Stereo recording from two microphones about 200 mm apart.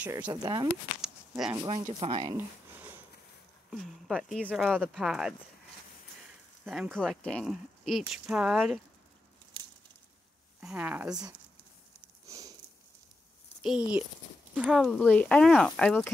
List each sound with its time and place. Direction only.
0.0 s speech: 5° right (ahead or behind)
0.3 s speech: 20° right (ahead or behind)
2.3 s a sound: 10° right (ahead or behind)
3.7 s speech: centre (ahead or behind)
6.6 s speech: centre (ahead or behind)
10.6 s speech: 5° right (ahead or behind)
12.3 s sniff: 15° right (ahead or behind)
13.6 s speech: 5° right (ahead or behind)